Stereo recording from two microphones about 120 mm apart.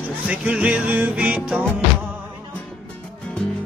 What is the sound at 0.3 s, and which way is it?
Music, 10° right (ahead or behind).